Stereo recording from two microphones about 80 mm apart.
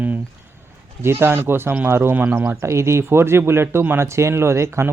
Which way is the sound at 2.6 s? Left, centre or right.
Right.